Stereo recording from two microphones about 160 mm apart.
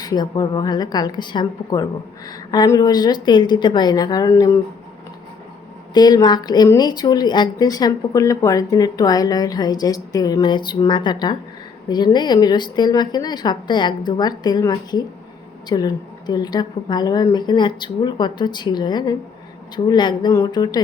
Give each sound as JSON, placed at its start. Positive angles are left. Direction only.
{"t": 0.0, "sound": "a woman's voice", "side_deg": 25}
{"t": 5.9, "sound": "a woman's voice", "side_deg": 25}